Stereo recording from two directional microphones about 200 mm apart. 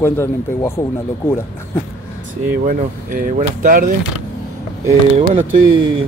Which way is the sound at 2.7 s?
45° right (ahead or behind).